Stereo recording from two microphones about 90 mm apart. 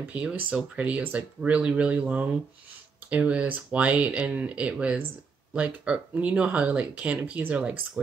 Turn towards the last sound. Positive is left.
turn(degrees=-15)  # may be behind; listen again after turning